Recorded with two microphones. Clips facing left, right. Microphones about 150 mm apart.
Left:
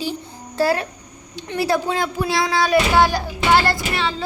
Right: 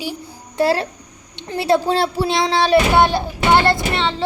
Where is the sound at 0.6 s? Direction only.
30° right (ahead or behind).